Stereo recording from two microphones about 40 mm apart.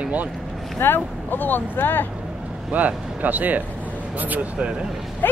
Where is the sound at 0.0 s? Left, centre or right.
Right.